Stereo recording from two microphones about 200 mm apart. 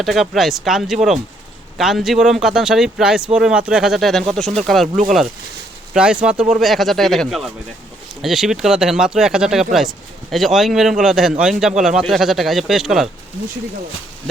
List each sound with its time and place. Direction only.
0.0 s speech: centre (ahead or behind)
5.9 s speech: 5° right (ahead or behind)